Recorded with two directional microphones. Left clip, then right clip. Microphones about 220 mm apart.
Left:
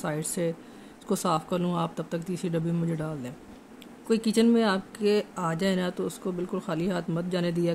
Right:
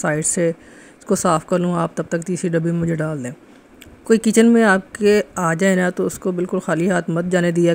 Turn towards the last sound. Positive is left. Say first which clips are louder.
# right 11 dB
turn(degrees=-30)  # may be behind; listen again after turning